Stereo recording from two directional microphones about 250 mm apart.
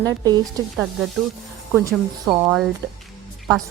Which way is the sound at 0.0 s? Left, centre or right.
Centre.